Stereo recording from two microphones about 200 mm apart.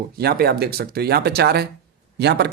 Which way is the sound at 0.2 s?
50° right (ahead or behind).